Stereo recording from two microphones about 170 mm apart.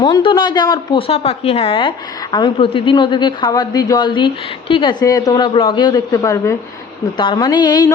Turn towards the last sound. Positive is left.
turn(degrees=25)  # may be behind; listen again after turning